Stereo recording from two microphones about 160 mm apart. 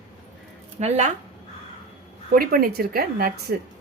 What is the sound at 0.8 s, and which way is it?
Speech, 45° right (ahead or behind).